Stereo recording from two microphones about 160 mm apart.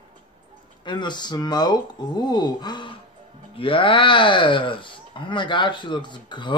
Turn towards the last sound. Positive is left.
turn(degrees=30)  # may be behind; listen again after turning